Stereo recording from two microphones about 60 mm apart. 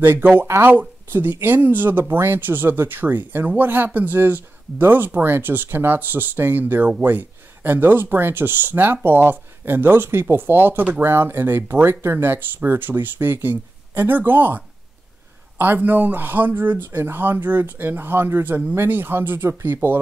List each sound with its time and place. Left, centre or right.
0.0 s speech: right